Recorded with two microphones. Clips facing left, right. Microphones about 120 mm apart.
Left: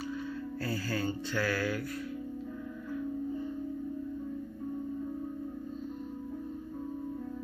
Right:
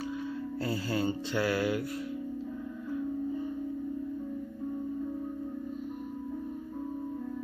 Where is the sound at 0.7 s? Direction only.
20° right (ahead or behind).